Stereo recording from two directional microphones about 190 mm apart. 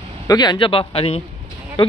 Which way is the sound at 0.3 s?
20° left (ahead or behind).